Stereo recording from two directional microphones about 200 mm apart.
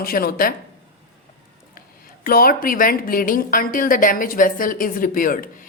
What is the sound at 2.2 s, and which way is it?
A woman's voice, 45° left (ahead or behind).